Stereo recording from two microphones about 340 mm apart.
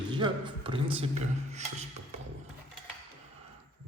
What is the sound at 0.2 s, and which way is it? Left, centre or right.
Speech, centre.